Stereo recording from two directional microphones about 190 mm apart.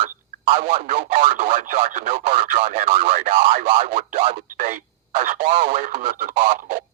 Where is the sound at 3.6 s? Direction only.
45° right (ahead or behind).